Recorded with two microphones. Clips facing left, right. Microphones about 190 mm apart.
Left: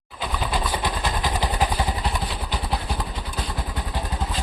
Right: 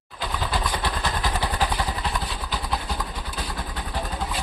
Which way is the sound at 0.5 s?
10° left (ahead or behind).